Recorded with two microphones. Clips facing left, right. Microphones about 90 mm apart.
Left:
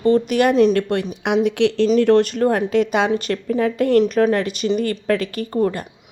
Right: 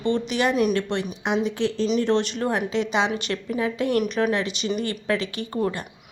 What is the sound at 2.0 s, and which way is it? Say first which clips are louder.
A woman's voice: left 9 dB; 50° left (ahead or behind).